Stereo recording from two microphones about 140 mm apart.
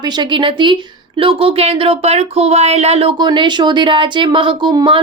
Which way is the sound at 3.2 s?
35° right (ahead or behind).